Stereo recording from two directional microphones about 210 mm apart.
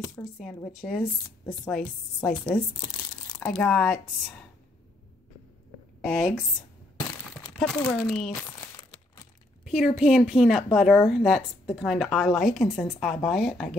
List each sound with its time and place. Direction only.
0.0 s speech: 15° left (ahead or behind)
0.8 s a woman's voice: centre (ahead or behind)
1.4 s a woman's voice: 15° left (ahead or behind)
5.9 s speech: centre (ahead or behind)
7.5 s a woman's voice: centre (ahead or behind)
9.7 s a woman's voice: centre (ahead or behind)